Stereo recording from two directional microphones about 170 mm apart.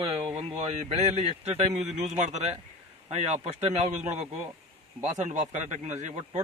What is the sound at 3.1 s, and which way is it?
Speech, 40° right (ahead or behind).